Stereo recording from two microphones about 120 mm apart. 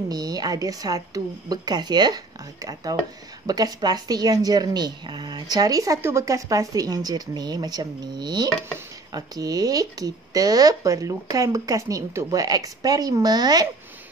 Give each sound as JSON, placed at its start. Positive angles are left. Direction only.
{"t": 0.1, "sound": "speech", "side_deg": -30}